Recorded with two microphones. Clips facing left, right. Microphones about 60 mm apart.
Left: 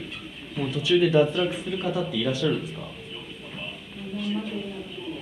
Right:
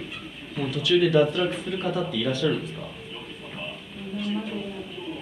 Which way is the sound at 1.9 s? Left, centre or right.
Centre.